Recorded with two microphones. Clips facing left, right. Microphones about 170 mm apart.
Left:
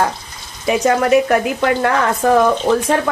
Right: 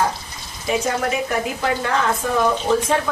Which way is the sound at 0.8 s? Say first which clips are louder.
Left 9 dB; 70° left (ahead or behind).